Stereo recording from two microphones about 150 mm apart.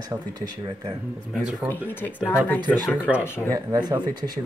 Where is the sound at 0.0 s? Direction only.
25° right (ahead or behind).